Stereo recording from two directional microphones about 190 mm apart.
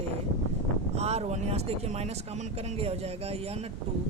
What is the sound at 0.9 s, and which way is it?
Speech, 35° right (ahead or behind).